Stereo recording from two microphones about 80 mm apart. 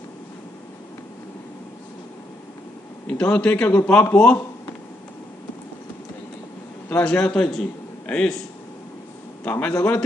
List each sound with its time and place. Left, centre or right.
3.1 s a man's voice: centre
6.9 s a man's voice: centre
9.4 s a man's voice: left